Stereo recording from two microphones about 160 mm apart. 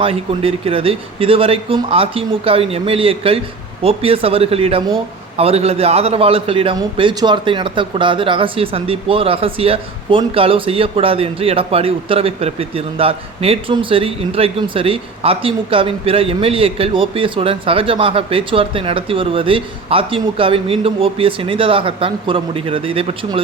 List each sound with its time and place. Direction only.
0.0 s speech: 35° right (ahead or behind)